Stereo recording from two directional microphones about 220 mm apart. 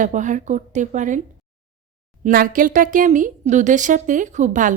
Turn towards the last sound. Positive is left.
turn(degrees=-35)  # may be behind; listen again after turning